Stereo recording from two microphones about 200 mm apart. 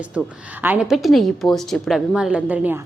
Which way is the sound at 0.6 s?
5° right (ahead or behind).